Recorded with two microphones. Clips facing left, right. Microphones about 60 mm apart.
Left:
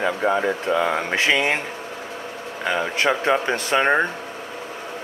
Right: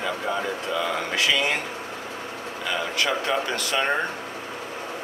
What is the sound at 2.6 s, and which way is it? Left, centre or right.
Speech, left.